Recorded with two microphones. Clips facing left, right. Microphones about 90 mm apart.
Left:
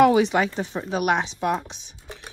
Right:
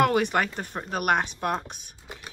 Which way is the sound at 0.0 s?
50° right (ahead or behind).